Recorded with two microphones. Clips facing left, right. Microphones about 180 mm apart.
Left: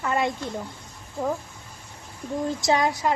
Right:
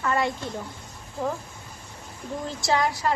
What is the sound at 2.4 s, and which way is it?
Speech, 20° left (ahead or behind).